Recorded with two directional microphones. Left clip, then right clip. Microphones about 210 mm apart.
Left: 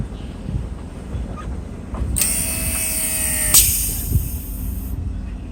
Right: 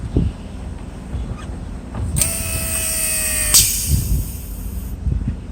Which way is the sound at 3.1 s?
Centre (ahead or behind).